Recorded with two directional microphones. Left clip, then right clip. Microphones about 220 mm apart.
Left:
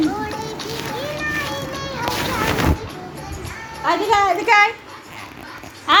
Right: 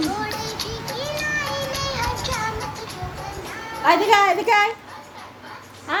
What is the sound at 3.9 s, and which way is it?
Speech, 25° right (ahead or behind).